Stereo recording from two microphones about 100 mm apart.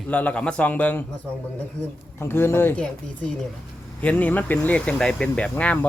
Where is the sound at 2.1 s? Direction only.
25° left (ahead or behind).